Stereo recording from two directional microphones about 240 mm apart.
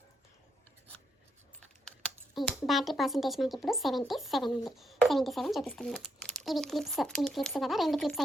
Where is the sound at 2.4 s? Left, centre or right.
Centre.